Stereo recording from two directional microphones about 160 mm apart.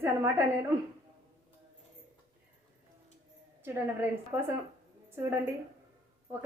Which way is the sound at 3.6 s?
15° right (ahead or behind).